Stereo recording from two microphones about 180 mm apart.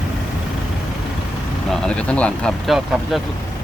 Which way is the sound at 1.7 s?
5° left (ahead or behind).